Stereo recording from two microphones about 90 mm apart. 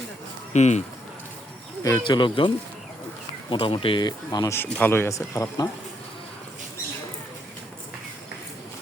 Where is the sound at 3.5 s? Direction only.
85° left; by 4.4 s 50° left (ahead or behind).